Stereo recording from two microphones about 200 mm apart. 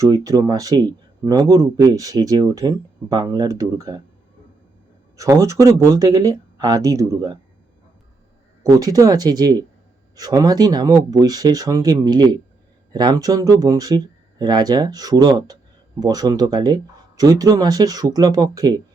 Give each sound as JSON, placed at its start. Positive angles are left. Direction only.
{"t": 0.3, "sound": "speech", "side_deg": -20}
{"t": 5.1, "sound": "speech", "side_deg": -15}
{"t": 8.6, "sound": "speech", "side_deg": -20}